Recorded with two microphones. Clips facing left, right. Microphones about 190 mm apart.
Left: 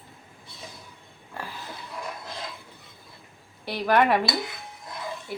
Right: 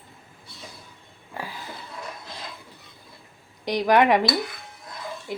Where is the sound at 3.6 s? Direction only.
15° right (ahead or behind).